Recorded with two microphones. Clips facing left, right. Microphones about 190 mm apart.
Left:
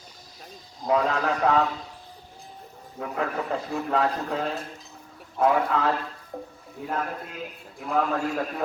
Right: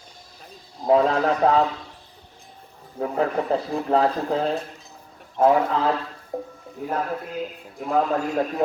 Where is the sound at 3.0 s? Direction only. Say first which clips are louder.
Right 6 dB; 35° right (ahead or behind).